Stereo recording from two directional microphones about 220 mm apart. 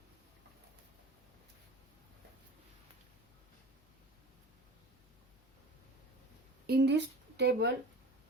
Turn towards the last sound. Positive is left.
turn(degrees=-50)  # may be behind; listen again after turning